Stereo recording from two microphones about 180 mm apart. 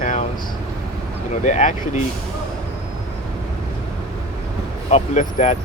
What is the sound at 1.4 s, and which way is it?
Speech, 40° left (ahead or behind).